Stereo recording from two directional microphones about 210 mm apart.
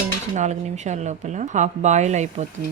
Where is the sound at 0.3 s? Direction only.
35° right (ahead or behind).